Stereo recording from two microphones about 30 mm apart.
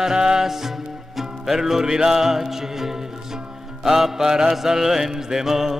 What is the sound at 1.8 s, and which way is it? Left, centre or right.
Music, right.